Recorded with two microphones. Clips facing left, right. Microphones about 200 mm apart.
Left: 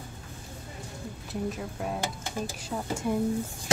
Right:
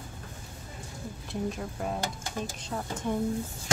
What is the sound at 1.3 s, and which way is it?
A woman's voice, 5° left (ahead or behind).